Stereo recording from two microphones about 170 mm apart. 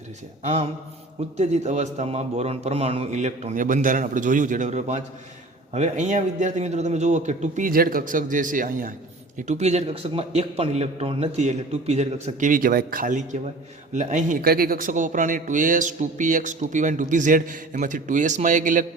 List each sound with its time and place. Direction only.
0.4 s a man's voice: 35° right (ahead or behind); by 8.9 s 50° right (ahead or behind)
9.5 s a man's voice: 40° right (ahead or behind)